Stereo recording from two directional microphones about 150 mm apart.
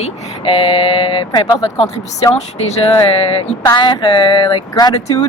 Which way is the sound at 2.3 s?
50° left (ahead or behind).